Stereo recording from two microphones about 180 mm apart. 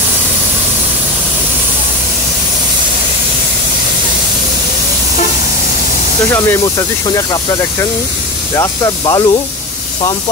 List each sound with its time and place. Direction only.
8.5 s speech: 20° left (ahead or behind)